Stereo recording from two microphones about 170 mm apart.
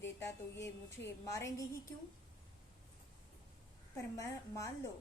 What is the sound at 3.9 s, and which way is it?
Speech, 15° left (ahead or behind).